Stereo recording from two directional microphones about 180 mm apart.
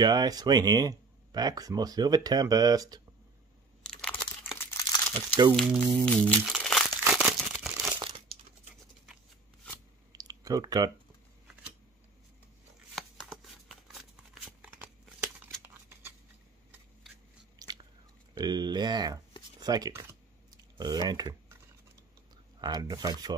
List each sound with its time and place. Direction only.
0.0 s speech: 20° right (ahead or behind)
3.8 s crunch: 5° left (ahead or behind)
5.1 s speech: 25° right (ahead or behind)
5.6 s speech: 5° right (ahead or behind)
6.4 s crumpling: centre (ahead or behind)
10.1 s a sound: 20° right (ahead or behind)
12.9 s a sound: centre (ahead or behind)
17.6 s biting: 20° right (ahead or behind)
18.4 s a sound: 25° right (ahead or behind)
19.6 s speech: 20° right (ahead or behind)
22.6 s speech: 20° right (ahead or behind)